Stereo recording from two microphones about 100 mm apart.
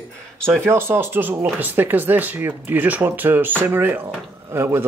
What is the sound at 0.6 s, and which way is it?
Speech, 25° right (ahead or behind).